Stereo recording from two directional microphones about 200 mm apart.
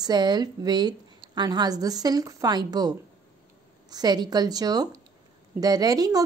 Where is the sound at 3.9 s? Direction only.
20° right (ahead or behind).